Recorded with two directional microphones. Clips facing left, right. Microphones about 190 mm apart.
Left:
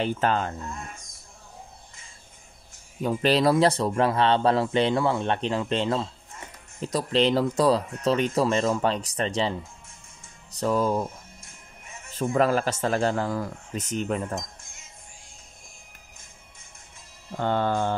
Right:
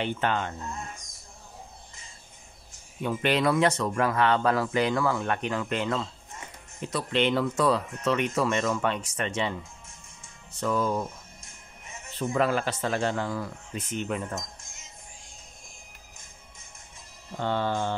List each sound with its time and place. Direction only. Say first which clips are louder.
0.0 s speech: left 3 dB; 40° left (ahead or behind)
3.0 s speech: left 3 dB; 35° left (ahead or behind)
12.1 s speech: left 3 dB; 40° left (ahead or behind)
17.4 s mantra: left 3 dB; 50° left (ahead or behind)